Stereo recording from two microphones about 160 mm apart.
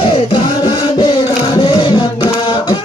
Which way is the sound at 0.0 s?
30° left (ahead or behind).